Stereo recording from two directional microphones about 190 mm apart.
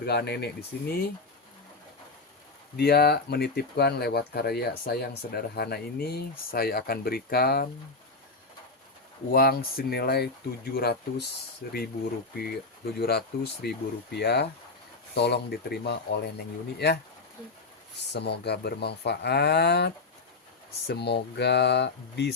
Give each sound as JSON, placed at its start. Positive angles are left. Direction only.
{"t": 0.0, "sound": "speech", "side_deg": 55}
{"t": 2.7, "sound": "speech", "side_deg": 55}
{"t": 9.3, "sound": "speech", "side_deg": 55}
{"t": 18.1, "sound": "speech", "side_deg": 60}